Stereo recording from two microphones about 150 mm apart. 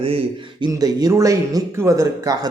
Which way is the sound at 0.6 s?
25° right (ahead or behind).